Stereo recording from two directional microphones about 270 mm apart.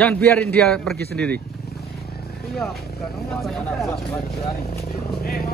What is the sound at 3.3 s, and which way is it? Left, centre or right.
Speech, centre.